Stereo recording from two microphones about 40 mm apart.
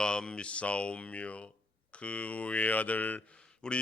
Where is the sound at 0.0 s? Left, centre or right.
Left.